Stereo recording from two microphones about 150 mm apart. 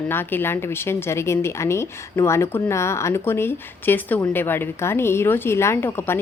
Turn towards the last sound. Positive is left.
turn(degrees=15)  # may be behind; listen again after turning